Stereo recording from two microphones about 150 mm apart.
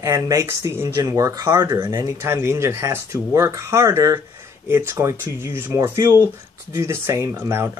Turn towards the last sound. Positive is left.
turn(degrees=-15)  # may be behind; listen again after turning